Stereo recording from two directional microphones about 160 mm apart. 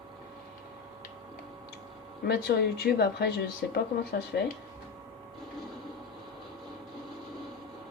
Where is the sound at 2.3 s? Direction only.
80° left.